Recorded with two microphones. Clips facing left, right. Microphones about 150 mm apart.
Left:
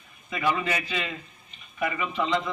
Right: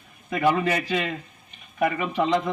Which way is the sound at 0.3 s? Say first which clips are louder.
Right 5 dB; 55° right (ahead or behind).